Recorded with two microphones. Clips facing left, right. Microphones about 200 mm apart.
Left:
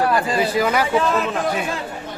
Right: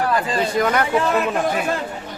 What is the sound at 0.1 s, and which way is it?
Speech, 10° left (ahead or behind).